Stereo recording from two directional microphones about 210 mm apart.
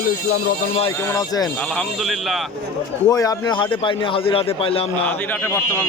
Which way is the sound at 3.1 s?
15° left (ahead or behind).